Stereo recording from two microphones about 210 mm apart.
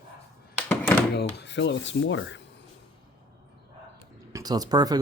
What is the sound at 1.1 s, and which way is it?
Rub, 55° left (ahead or behind).